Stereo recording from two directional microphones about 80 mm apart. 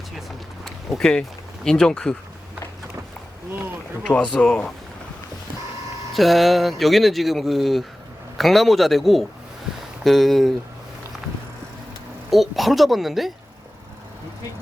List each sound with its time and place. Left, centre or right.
0.2 s a sound: centre
1.6 s speech: centre
4.0 s speech: centre
6.1 s speech: centre
12.3 s speech: centre